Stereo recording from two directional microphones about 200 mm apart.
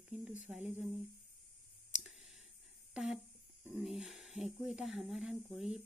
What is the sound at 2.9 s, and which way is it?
Speech, centre (ahead or behind).